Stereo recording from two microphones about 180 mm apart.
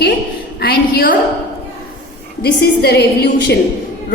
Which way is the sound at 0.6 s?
60° left (ahead or behind).